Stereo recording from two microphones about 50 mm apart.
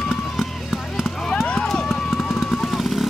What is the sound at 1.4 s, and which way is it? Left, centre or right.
Run, centre.